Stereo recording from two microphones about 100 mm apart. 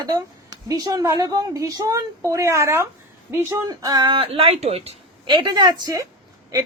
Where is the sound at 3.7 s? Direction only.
45° right (ahead or behind); by 4.9 s 90° right.